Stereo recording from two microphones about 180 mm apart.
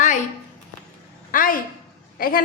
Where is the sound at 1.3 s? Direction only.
50° left (ahead or behind).